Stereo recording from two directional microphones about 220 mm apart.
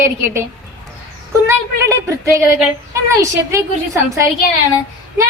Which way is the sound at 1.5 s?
15° right (ahead or behind).